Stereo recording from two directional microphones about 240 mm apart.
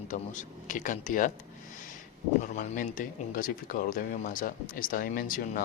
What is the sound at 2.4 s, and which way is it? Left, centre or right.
Speech, left.